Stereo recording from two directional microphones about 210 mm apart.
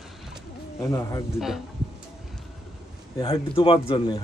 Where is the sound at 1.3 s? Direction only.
Centre (ahead or behind).